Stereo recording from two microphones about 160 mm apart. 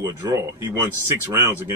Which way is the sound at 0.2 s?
20° right (ahead or behind).